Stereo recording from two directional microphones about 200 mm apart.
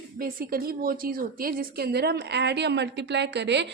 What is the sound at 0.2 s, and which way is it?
A woman's voice, 45° right (ahead or behind).